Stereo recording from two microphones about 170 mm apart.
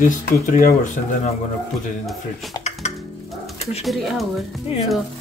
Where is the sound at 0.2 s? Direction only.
55° left (ahead or behind).